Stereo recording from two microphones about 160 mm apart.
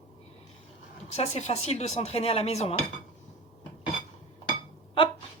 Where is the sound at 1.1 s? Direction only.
40° left (ahead or behind).